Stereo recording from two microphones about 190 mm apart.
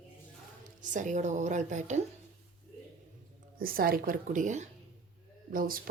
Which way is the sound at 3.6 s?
50° right (ahead or behind).